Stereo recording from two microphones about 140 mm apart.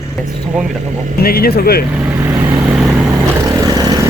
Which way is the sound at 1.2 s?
90° left.